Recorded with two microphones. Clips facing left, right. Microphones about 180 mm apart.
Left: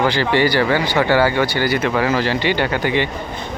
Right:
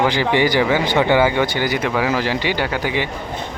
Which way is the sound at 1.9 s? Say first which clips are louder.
Left 1 dB; centre (ahead or behind).